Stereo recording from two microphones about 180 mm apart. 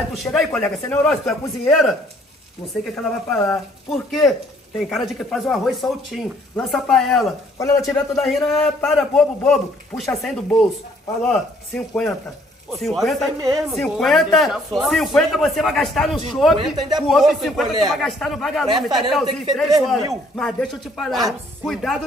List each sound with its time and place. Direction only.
0.1 s speech: centre (ahead or behind)
7.5 s a man's voice: 20° left (ahead or behind)
8.2 s speech: centre (ahead or behind)